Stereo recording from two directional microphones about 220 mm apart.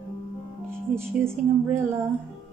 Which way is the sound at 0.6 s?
10° right (ahead or behind).